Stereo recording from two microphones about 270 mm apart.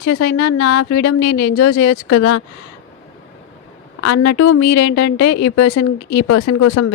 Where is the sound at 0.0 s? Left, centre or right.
Left.